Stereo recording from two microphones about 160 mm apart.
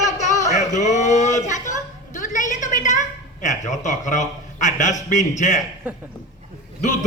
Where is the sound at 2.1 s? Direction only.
55° left (ahead or behind).